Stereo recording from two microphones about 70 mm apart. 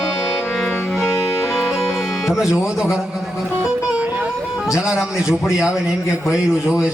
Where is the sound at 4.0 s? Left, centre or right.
Right.